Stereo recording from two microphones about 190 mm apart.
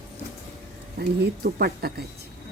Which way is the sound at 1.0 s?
55° right (ahead or behind).